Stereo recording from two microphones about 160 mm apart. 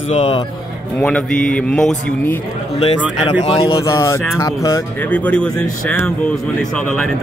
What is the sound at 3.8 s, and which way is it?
Speech, 20° left (ahead or behind).